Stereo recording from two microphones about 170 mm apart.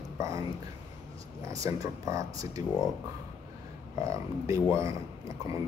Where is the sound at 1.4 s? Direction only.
20° right (ahead or behind).